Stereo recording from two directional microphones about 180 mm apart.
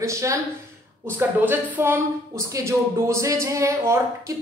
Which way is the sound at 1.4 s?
10° right (ahead or behind).